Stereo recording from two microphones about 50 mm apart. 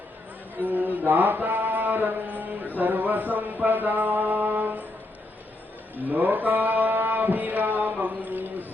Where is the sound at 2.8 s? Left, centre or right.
Right.